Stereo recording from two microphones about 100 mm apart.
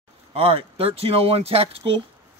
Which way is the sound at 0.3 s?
75° right (ahead or behind).